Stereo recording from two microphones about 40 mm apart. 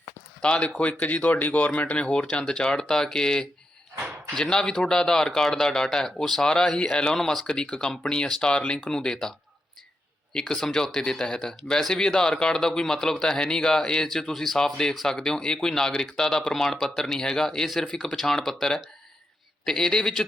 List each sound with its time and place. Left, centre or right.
0.4 s speech: left
0.8 s speech: left
2.0 s speech: left
10.5 s speech: centre